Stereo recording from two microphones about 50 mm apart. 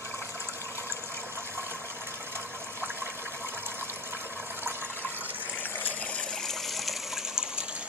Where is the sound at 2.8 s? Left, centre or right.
Right.